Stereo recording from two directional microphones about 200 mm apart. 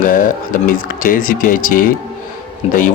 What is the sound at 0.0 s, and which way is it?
A man's voice, 40° left (ahead or behind).